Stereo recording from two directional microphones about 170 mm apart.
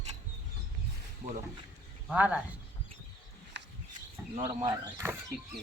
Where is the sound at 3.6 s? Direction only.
90° right.